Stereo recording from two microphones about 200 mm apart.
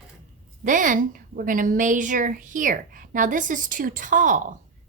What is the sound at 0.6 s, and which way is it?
A woman's voice, 40° right (ahead or behind).